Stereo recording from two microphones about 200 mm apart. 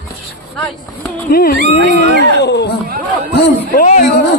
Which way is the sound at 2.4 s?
60° left (ahead or behind).